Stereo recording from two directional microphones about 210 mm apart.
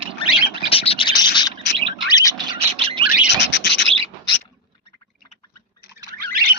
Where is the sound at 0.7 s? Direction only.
25° left (ahead or behind).